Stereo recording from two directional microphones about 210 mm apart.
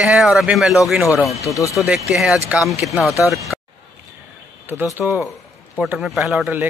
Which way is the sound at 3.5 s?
Centre (ahead or behind).